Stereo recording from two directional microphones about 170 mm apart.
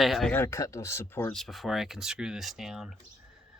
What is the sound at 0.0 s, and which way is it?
Speech, centre (ahead or behind).